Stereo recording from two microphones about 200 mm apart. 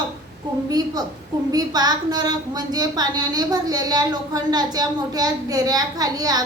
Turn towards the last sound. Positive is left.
turn(degrees=-20)  # may be behind; listen again after turning